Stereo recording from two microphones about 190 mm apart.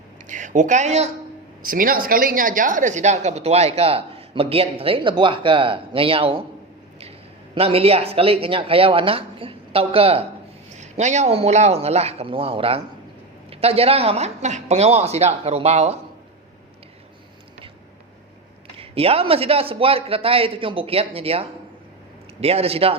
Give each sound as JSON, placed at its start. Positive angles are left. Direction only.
{"t": 0.3, "sound": "a woman's voice", "side_deg": -40}
{"t": 1.6, "sound": "a woman's voice", "side_deg": -50}
{"t": 7.5, "sound": "a woman's voice", "side_deg": -30}
{"t": 18.8, "sound": "a woman's voice", "side_deg": -30}